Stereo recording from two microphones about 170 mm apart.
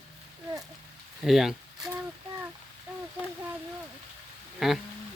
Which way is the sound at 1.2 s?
Centre (ahead or behind).